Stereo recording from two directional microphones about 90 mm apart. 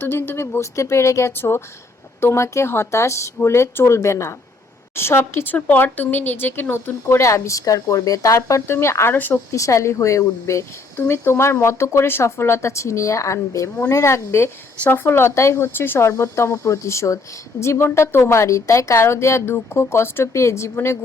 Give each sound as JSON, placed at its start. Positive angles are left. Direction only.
{"t": 0.0, "sound": "speech", "side_deg": 25}
{"t": 9.5, "sound": "speech", "side_deg": 35}